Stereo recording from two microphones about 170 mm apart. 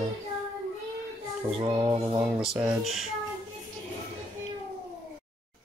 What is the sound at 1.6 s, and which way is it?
Music, 25° right (ahead or behind).